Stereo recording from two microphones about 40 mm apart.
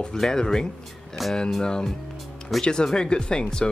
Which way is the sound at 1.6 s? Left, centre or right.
Centre.